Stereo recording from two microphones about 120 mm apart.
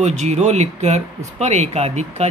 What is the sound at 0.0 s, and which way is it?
Speech, 70° right (ahead or behind).